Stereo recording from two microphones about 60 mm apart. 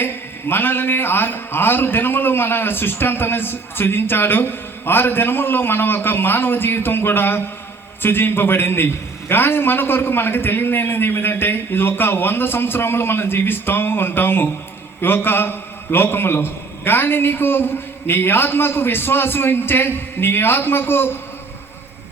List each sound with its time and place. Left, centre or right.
0.0 s a man's voice: left